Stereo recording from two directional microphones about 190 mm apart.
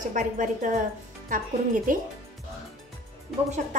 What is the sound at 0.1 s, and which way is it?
Speech, 40° right (ahead or behind).